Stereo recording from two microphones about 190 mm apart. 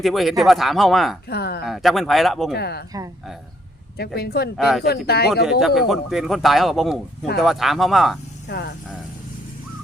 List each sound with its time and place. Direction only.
0.0 s a man's voice: centre (ahead or behind)
1.3 s speech: 55° left (ahead or behind)
1.6 s a man's voice: centre (ahead or behind)
2.6 s speech: 60° left (ahead or behind)
3.9 s speech: 55° left (ahead or behind)
4.5 s a man's voice: centre (ahead or behind)
4.9 s speech: 55° left (ahead or behind)
5.5 s a man's voice: centre (ahead or behind)
8.4 s speech: 55° left (ahead or behind)